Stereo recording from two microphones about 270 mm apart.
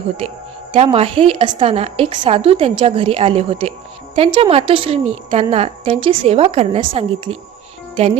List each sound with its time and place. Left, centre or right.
0.7 s a woman's voice: right